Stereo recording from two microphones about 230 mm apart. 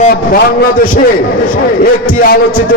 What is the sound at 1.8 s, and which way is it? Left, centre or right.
Speech, left.